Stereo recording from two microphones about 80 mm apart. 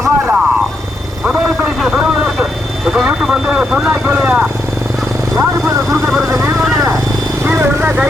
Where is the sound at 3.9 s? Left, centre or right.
Right.